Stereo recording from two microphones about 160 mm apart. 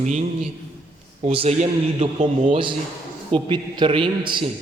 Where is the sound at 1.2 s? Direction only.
35° right (ahead or behind).